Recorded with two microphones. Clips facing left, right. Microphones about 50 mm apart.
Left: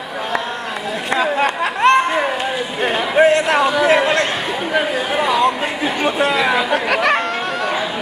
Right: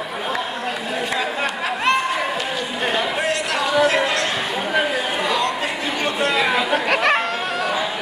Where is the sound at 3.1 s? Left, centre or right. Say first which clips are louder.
Left 9 dB; left.